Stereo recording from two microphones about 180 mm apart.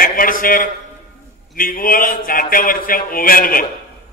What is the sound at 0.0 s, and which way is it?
A man's voice, 50° left (ahead or behind).